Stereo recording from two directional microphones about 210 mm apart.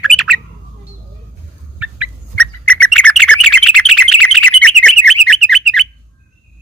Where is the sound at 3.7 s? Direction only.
90° left.